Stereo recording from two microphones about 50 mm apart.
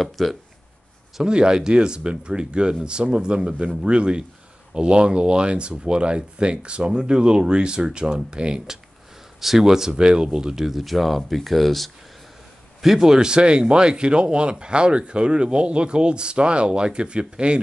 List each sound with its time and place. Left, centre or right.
0.0 s speech: centre
1.1 s speech: centre
9.4 s speech: centre